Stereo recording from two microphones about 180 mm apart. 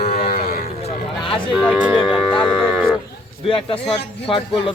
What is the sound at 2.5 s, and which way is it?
Livestock, centre (ahead or behind).